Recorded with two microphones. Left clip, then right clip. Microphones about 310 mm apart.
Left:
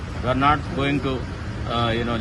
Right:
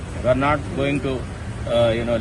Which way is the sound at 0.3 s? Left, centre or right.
Centre.